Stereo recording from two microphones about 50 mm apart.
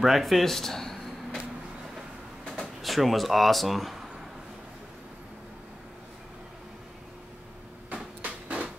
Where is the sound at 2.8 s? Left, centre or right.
Centre.